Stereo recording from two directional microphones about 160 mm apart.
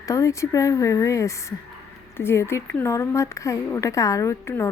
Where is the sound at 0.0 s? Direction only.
20° left (ahead or behind).